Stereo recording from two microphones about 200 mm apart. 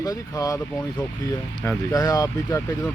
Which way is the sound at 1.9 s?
15° left (ahead or behind).